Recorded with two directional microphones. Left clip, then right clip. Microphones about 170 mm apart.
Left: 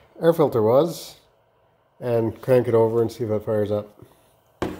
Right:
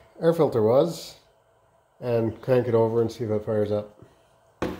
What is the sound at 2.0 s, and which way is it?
Speech, 20° left (ahead or behind).